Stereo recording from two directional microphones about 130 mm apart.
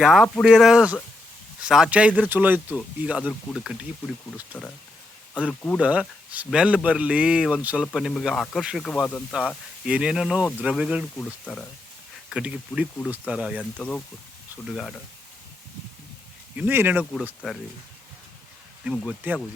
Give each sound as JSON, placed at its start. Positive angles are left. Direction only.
{"t": 0.0, "sound": "speech", "side_deg": 0}
{"t": 4.5, "sound": "speech", "side_deg": 10}
{"t": 5.8, "sound": "speech", "side_deg": -10}
{"t": 9.8, "sound": "speech", "side_deg": -5}
{"t": 12.3, "sound": "speech", "side_deg": -10}
{"t": 13.7, "sound": "speech", "side_deg": 10}
{"t": 16.6, "sound": "speech", "side_deg": -15}
{"t": 18.9, "sound": "speech", "side_deg": -10}